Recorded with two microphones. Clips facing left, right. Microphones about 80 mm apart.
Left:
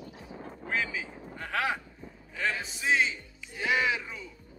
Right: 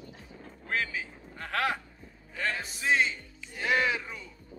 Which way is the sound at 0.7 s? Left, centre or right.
Centre.